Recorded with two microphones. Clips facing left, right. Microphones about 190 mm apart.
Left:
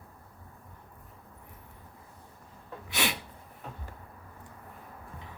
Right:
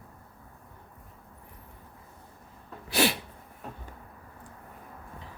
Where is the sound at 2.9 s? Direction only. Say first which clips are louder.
Right 7 dB; 35° right (ahead or behind).